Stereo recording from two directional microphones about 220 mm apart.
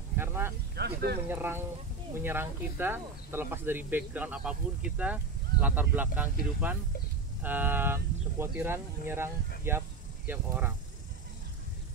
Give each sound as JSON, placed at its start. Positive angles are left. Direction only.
{"t": 0.2, "sound": "a sound", "side_deg": -10}
{"t": 0.7, "sound": "speech", "side_deg": -45}
{"t": 1.3, "sound": "speech", "side_deg": -10}
{"t": 7.4, "sound": "speech", "side_deg": -10}
{"t": 9.7, "sound": "snake", "side_deg": -10}